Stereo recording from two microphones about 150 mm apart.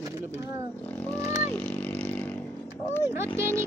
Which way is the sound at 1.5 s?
10° left (ahead or behind).